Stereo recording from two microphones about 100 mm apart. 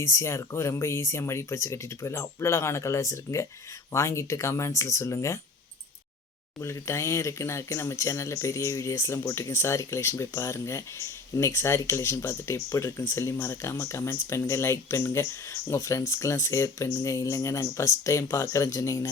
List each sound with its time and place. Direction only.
0.0 s speech: 30° left (ahead or behind)
6.6 s speech: 30° left (ahead or behind)